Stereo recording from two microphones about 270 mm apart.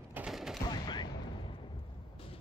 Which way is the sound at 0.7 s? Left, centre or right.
Centre.